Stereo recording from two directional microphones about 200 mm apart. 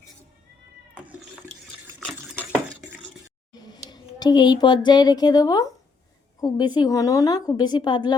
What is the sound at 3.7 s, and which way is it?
A woman's voice, 20° left (ahead or behind).